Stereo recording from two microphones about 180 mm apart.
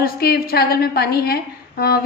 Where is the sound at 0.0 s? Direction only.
55° left (ahead or behind).